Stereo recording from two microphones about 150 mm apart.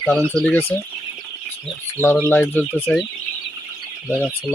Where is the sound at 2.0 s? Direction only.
15° right (ahead or behind).